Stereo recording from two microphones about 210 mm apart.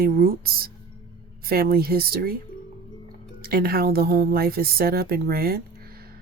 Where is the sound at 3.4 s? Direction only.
45° right (ahead or behind).